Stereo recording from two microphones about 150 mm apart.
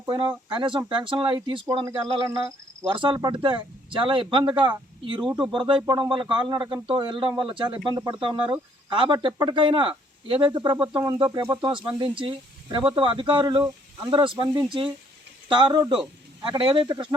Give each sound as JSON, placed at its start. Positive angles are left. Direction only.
{"t": 0.0, "sound": "speech", "side_deg": -30}
{"t": 13.6, "sound": "speech", "side_deg": -20}
{"t": 14.2, "sound": "speech", "side_deg": -30}